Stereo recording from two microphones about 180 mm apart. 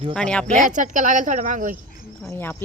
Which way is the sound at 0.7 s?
45° right (ahead or behind).